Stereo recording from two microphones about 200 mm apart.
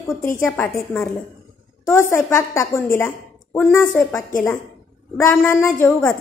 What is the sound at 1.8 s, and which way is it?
A woman's voice, 15° left (ahead or behind).